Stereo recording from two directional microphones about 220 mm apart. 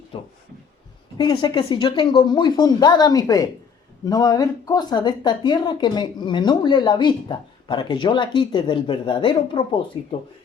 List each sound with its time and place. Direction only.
1.2 s speech: 20° left (ahead or behind)